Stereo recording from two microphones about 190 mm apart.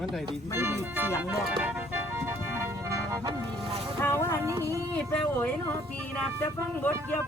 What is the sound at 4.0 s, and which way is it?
Speech, 15° left (ahead or behind).